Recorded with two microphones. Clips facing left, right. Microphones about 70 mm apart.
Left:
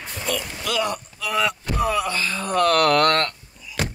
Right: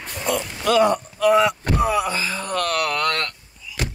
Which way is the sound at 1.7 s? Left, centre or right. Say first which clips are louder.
Left 1 dB; centre.